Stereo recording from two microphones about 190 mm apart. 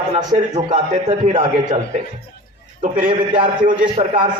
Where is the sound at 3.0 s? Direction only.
25° right (ahead or behind).